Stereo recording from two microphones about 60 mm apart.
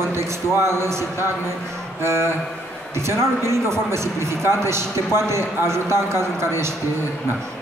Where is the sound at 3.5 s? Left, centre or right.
Right.